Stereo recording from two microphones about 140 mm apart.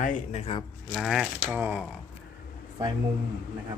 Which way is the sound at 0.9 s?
Centre (ahead or behind).